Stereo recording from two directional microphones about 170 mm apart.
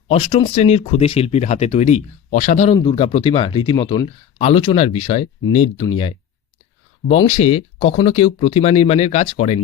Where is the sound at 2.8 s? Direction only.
30° left (ahead or behind).